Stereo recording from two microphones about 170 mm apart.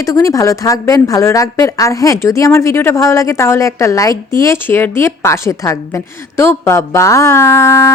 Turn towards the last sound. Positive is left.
turn(degrees=15)  # may be behind; listen again after turning